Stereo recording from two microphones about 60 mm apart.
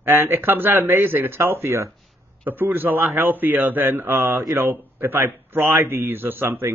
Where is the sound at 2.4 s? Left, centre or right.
Right.